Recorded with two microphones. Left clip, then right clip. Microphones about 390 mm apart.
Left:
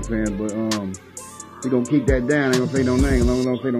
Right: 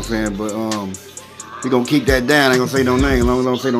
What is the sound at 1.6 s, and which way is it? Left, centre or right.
Speech, centre.